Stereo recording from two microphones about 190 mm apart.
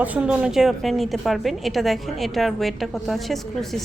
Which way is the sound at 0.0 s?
5° right (ahead or behind).